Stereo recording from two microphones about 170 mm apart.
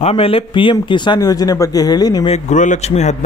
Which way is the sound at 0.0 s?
35° left (ahead or behind).